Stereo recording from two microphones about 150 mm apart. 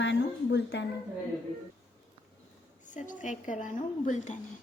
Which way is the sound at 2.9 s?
55° left (ahead or behind).